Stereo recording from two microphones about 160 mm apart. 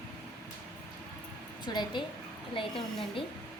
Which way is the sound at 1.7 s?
25° left (ahead or behind).